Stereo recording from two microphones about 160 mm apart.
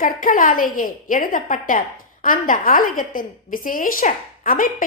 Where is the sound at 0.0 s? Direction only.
60° left (ahead or behind).